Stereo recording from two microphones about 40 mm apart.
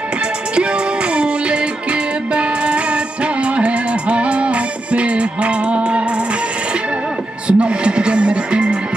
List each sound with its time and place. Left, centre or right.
1.1 s music: right
7.4 s music: right